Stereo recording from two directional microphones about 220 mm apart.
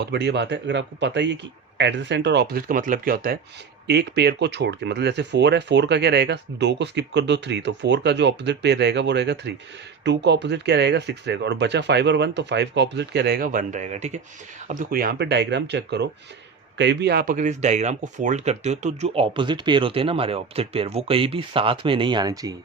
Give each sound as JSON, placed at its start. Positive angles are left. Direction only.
{"t": 0.0, "sound": "speech", "side_deg": -50}